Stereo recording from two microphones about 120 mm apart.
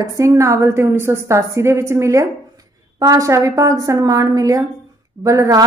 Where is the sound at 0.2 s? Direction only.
25° right (ahead or behind).